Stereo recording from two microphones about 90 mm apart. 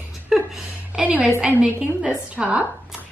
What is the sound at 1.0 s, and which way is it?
A woman's voice, 15° right (ahead or behind).